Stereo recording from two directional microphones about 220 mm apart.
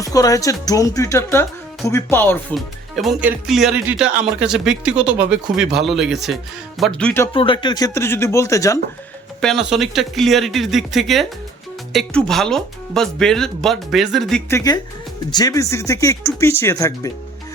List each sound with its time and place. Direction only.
0.0 s speech: 15° left (ahead or behind)
7.3 s speech: 20° left (ahead or behind)
9.4 s speech: centre (ahead or behind)
15.3 s speech: 15° left (ahead or behind)